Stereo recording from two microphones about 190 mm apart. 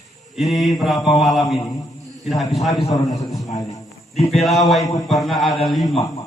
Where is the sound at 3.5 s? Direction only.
15° left (ahead or behind).